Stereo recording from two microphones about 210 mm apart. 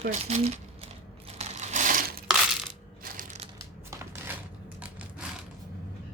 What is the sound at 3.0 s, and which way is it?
Crushing, 40° right (ahead or behind).